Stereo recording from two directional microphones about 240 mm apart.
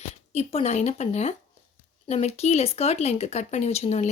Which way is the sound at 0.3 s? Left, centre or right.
Left.